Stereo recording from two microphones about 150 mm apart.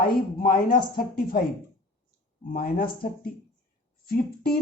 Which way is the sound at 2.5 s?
75° left (ahead or behind).